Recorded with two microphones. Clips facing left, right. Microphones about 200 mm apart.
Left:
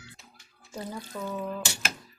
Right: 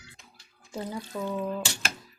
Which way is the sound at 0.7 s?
10° right (ahead or behind).